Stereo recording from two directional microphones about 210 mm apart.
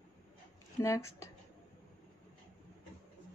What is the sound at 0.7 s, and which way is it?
Speech, 15° left (ahead or behind).